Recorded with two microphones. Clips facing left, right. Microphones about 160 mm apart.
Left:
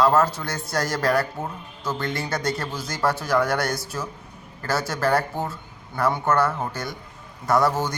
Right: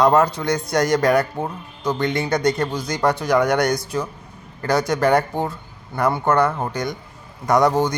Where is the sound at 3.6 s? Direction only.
5° left (ahead or behind).